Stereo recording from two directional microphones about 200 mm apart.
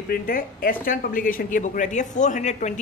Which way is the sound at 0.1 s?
45° left (ahead or behind).